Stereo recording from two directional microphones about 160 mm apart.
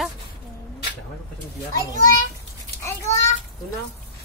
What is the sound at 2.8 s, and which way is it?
Children playing, 20° left (ahead or behind).